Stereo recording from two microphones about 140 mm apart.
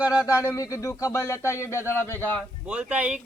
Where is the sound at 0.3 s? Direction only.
20° left (ahead or behind).